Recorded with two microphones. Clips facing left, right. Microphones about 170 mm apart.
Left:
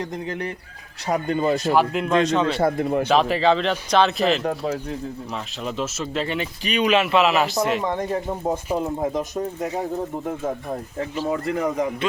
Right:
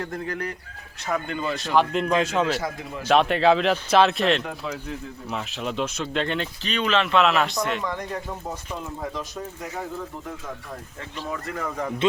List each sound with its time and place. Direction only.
0.0 s speech: 20° left (ahead or behind)
1.0 s speech: 35° left (ahead or behind)
1.7 s speech: 5° left (ahead or behind)
2.6 s a man's voice: 55° left (ahead or behind)
3.1 s speech: centre (ahead or behind)
7.8 s speech: 30° left (ahead or behind)
9.3 s speech: 20° left (ahead or behind)
10.2 s speech: 50° left (ahead or behind)
11.2 s speech: 25° left (ahead or behind)